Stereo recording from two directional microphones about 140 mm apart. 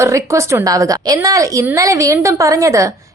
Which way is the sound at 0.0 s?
20° right (ahead or behind).